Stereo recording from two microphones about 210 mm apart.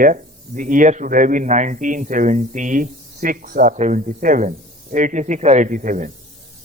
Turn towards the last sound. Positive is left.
turn(degrees=-40)  # may be behind; listen again after turning